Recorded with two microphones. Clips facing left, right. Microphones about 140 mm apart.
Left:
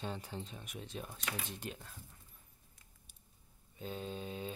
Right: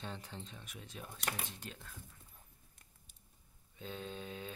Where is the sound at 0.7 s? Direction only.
25° left (ahead or behind).